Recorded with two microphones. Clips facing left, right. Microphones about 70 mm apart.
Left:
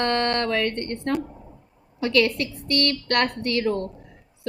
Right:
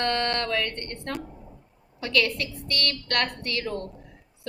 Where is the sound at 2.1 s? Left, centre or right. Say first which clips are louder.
Left 4 dB; left.